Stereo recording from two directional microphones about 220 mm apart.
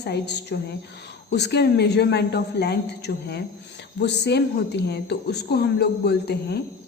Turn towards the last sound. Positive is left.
turn(degrees=50)  # may be behind; listen again after turning